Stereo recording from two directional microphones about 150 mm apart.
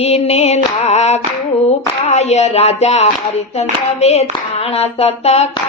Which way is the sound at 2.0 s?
50° left (ahead or behind).